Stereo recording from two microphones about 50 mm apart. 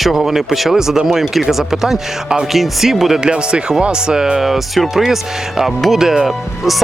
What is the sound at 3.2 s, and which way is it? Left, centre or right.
Speech, centre.